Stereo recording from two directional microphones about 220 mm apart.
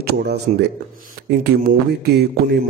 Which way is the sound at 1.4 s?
45° right (ahead or behind).